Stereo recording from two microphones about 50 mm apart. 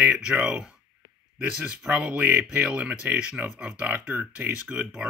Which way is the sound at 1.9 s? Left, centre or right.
Right.